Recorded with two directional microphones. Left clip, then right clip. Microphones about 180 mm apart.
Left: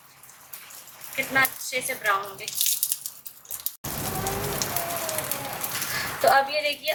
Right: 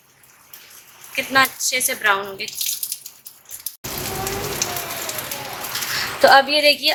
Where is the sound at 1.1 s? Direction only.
70° right (ahead or behind).